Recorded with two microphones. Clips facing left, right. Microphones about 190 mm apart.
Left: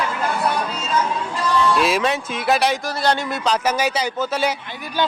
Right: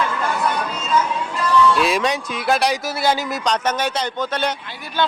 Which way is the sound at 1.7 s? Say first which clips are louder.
Even; centre (ahead or behind).